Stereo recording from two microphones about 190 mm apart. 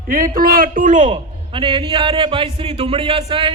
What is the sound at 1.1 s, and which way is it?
A man's voice, 25° right (ahead or behind).